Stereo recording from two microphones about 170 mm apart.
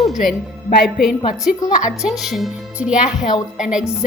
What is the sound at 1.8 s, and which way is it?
A woman's voice, 5° right (ahead or behind).